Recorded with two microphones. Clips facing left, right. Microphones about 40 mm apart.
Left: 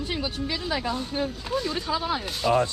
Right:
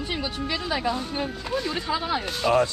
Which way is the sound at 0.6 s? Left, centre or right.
Centre.